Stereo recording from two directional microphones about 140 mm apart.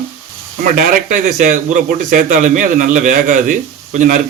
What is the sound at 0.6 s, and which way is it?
Speech, 70° right (ahead or behind).